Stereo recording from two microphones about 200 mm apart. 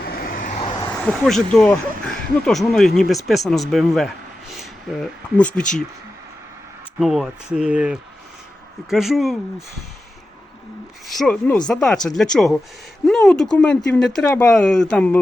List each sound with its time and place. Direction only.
0.0 s vehicle: 50° left (ahead or behind)
0.9 s speech: centre (ahead or behind)
7.0 s speech: centre (ahead or behind)
11.1 s speech: 5° left (ahead or behind)